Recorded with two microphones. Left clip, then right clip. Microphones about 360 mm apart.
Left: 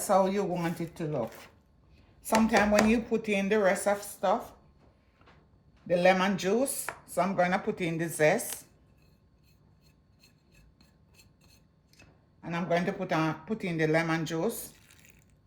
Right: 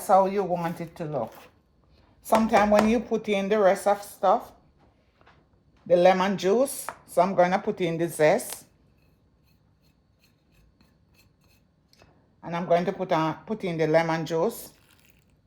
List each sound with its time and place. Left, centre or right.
0.1 s speech: centre
2.2 s speech: centre
5.9 s speech: centre
11.9 s speech: centre